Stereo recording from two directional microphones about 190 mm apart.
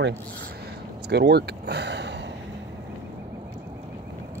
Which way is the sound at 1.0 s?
60° right (ahead or behind).